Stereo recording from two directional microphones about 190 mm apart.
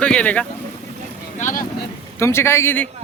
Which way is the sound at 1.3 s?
40° left (ahead or behind).